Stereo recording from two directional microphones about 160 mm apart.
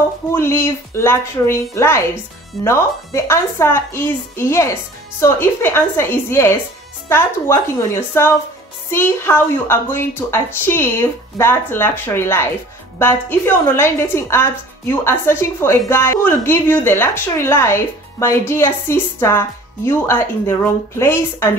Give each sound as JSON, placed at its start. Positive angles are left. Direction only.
{"t": 0.3, "sound": "a woman's voice", "side_deg": 15}